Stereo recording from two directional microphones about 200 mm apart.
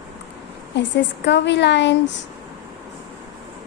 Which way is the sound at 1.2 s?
60° left (ahead or behind).